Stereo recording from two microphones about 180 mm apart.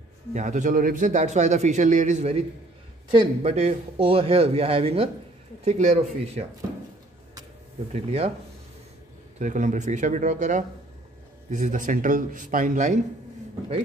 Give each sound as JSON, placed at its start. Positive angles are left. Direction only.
{"t": 0.3, "sound": "a man's voice", "side_deg": -40}
{"t": 7.9, "sound": "a man's voice", "side_deg": -35}
{"t": 9.4, "sound": "a man's voice", "side_deg": -45}